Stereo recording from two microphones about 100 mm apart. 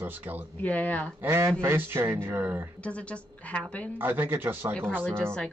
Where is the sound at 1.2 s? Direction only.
25° right (ahead or behind).